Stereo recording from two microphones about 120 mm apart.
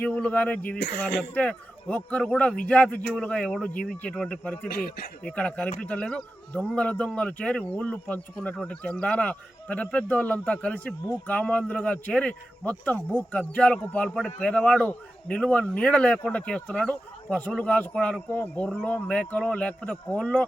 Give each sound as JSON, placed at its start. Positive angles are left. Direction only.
{"t": 0.0, "sound": "a man's voice", "side_deg": 15}